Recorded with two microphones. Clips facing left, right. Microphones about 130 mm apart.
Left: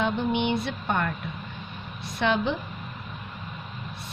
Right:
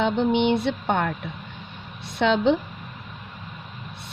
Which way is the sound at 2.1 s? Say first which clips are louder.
Right 5 dB; 80° right.